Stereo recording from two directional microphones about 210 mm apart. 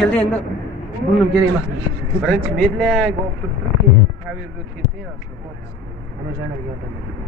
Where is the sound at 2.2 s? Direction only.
Centre (ahead or behind).